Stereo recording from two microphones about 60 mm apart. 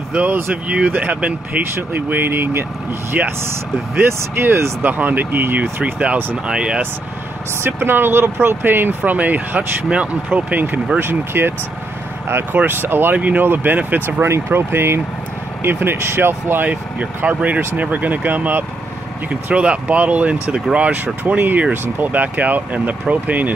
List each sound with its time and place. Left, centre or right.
0.1 s speech: right
3.1 s speech: right
4.2 s speech: right
4.8 s speech: right
6.4 s speech: centre
7.6 s speech: right
12.5 s speech: right
14.2 s speech: right
17.0 s speech: right
19.2 s speech: centre